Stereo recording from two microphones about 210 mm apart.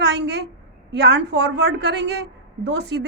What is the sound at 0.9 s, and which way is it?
A woman's voice, 55° right (ahead or behind).